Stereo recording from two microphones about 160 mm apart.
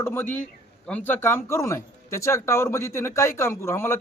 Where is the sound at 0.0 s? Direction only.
15° left (ahead or behind).